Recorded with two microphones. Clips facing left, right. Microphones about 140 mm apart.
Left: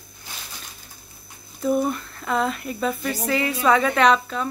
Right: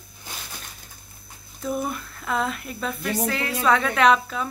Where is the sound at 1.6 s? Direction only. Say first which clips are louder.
Left 6 dB; centre (ahead or behind).